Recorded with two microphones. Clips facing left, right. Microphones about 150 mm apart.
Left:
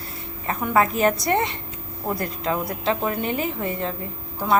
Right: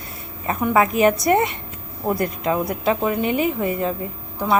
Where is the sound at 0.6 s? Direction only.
10° right (ahead or behind).